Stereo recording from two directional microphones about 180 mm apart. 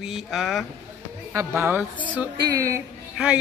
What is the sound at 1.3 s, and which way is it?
A woman's voice, 15° right (ahead or behind).